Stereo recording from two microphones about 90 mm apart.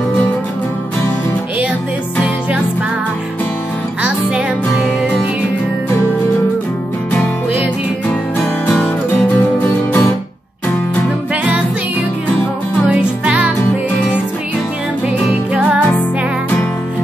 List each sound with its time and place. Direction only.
9.4 s music: 20° left (ahead or behind)
12.8 s music: 10° right (ahead or behind)